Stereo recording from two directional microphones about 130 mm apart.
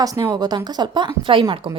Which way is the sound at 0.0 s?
30° right (ahead or behind).